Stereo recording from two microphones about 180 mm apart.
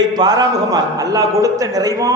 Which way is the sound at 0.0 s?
20° right (ahead or behind).